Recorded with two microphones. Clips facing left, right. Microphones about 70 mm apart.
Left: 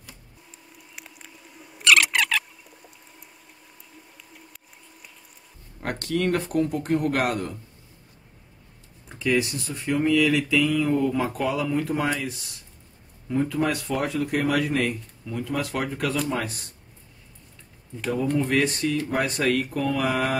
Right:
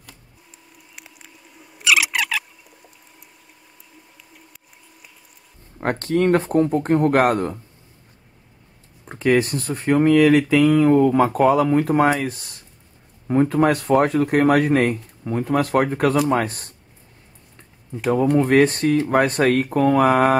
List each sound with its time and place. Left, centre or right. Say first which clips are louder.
0.0 s a sound: right 1 dB; centre
5.8 s speech: right 7 dB; right
9.0 s speech: right 6 dB; right
18.1 s speech: right 7 dB; right